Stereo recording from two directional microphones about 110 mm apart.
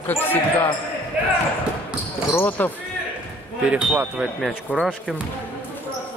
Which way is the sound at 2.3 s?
20° left (ahead or behind).